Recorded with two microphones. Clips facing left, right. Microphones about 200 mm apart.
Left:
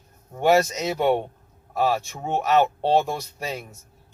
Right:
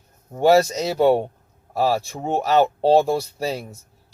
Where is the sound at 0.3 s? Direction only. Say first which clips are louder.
Right 3 dB; 35° right (ahead or behind).